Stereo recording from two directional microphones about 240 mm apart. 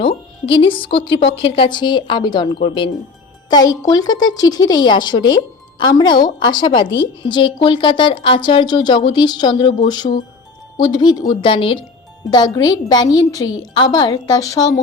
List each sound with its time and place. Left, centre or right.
0.0 s music: left
0.9 s a woman's voice: left